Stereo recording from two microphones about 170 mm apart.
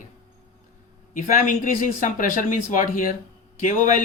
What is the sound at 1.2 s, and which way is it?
Speech, 50° left (ahead or behind).